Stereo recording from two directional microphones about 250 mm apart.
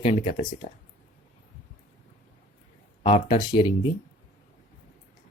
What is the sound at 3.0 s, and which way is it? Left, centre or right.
Speech, left.